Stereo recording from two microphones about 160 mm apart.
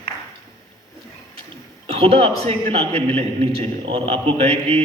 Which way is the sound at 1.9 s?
40° right (ahead or behind).